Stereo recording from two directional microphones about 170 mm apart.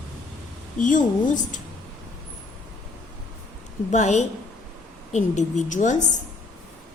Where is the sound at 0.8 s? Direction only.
50° left (ahead or behind).